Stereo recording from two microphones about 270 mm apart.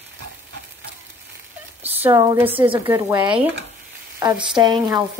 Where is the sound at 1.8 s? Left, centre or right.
Centre.